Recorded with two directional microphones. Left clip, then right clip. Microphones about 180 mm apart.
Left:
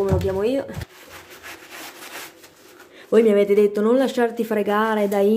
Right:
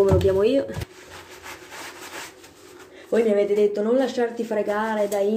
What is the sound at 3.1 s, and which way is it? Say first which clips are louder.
Speech: left 4 dB; 35° left (ahead or behind).